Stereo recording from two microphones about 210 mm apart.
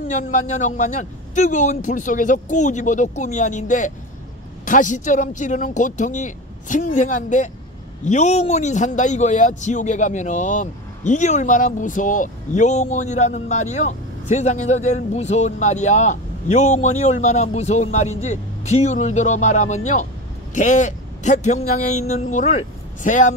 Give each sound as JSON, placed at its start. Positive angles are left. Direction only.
{"t": 0.1, "sound": "a man's voice", "side_deg": 35}